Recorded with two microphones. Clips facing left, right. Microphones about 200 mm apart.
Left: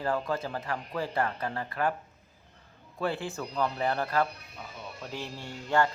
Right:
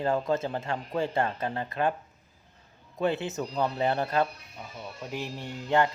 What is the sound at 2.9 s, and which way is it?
Speech, 20° right (ahead or behind).